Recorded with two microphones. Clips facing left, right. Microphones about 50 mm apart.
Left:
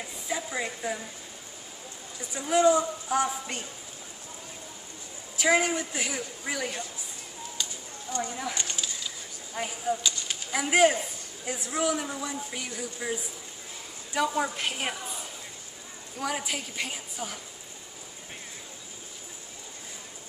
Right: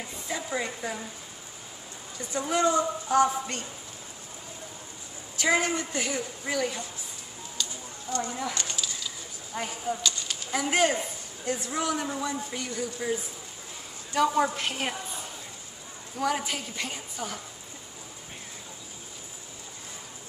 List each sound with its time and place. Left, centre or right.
0.3 s a woman's voice: centre
2.5 s a woman's voice: centre
5.3 s a woman's voice: centre
7.6 s a sound: centre
8.2 s a woman's voice: centre
9.6 s a woman's voice: centre
10.0 s a sound: centre
11.4 s a woman's voice: centre
16.2 s a woman's voice: centre